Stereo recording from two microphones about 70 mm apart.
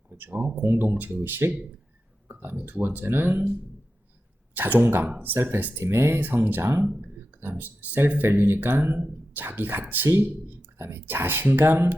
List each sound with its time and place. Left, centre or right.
0.1 s speech: right
4.5 s speech: right
5.8 s speech: right
6.1 s speech: right
7.0 s speech: right